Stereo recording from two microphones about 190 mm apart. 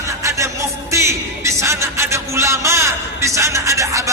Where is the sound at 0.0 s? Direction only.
15° right (ahead or behind).